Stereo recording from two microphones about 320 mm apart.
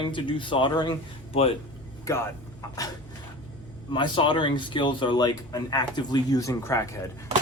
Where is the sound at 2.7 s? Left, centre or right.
Centre.